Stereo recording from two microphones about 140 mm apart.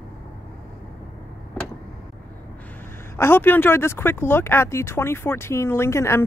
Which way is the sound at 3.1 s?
15° left (ahead or behind).